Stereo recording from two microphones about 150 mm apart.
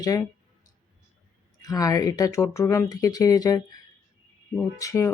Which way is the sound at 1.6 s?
25° left (ahead or behind).